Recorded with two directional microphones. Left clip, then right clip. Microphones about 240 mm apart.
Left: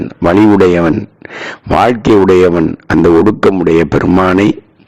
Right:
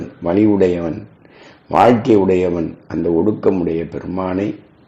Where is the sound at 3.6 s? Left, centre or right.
Left.